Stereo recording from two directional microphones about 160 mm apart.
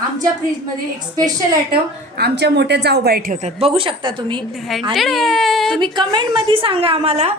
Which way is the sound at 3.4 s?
40° right (ahead or behind).